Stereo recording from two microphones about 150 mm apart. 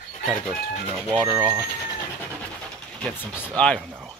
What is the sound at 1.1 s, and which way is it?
Speech, centre (ahead or behind).